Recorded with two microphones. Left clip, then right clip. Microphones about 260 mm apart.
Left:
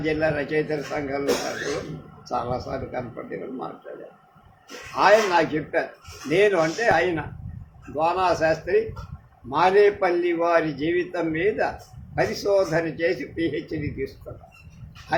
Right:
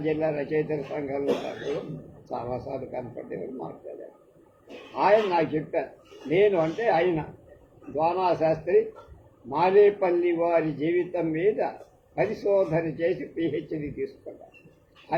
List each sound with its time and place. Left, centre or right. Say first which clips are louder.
0.0 s a man's voice: left 3 dB; left
2.3 s speech: left 5 dB; left
4.9 s a man's voice: left 4 dB; left